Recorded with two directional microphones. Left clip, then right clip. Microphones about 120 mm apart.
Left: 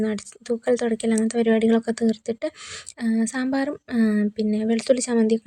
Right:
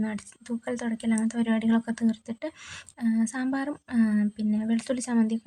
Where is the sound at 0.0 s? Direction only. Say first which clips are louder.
Left 8 dB; 35° left (ahead or behind).